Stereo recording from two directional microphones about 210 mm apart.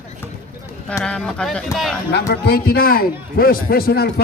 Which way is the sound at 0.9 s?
5° left (ahead or behind).